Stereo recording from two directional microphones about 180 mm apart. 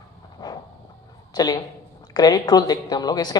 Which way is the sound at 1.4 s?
20° left (ahead or behind).